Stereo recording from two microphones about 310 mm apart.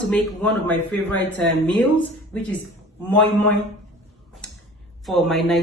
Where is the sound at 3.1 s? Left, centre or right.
Centre.